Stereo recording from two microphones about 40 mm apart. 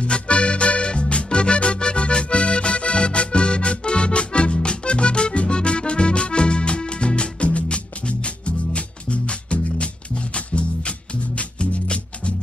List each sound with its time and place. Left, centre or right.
0.0 s accordion: left
10.3 s music: left